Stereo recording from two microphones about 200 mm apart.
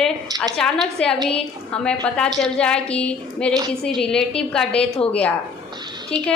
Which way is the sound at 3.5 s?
20° right (ahead or behind).